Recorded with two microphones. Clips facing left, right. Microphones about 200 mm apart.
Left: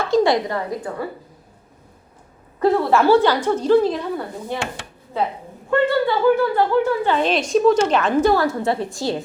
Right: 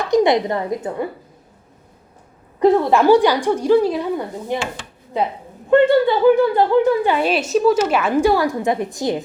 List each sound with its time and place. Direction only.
0.0 s a woman's voice: 20° right (ahead or behind)
2.6 s a woman's voice: 15° right (ahead or behind)